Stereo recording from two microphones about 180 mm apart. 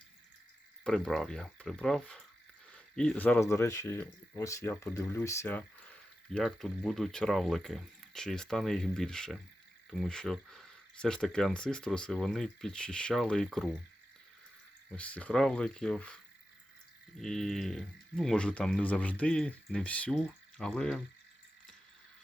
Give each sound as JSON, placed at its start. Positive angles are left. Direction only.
{"t": 0.9, "sound": "speech", "side_deg": 0}
{"t": 6.3, "sound": "speech", "side_deg": 0}
{"t": 14.8, "sound": "speech", "side_deg": 5}
{"t": 17.2, "sound": "speech", "side_deg": 0}